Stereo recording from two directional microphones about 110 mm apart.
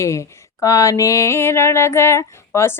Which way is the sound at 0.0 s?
25° left (ahead or behind).